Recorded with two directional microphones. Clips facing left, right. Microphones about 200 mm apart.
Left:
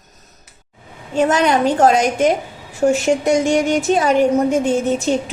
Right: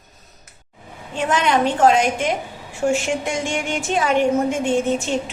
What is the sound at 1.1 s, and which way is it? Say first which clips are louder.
A woman's voice: left 4 dB; 40° left (ahead or behind).